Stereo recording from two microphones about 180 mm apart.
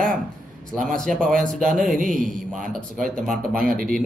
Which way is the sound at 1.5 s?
45° right (ahead or behind).